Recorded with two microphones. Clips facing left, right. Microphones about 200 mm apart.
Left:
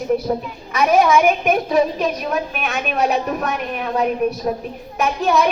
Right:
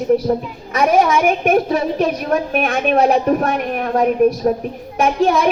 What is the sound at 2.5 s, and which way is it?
A woman's voice, 50° right (ahead or behind).